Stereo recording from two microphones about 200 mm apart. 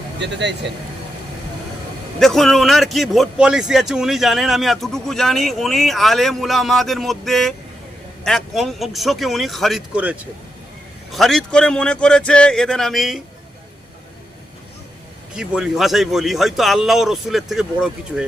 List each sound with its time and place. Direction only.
0.2 s speech: 60° right (ahead or behind)
2.1 s a man's voice: centre (ahead or behind)
15.4 s a man's voice: 5° right (ahead or behind)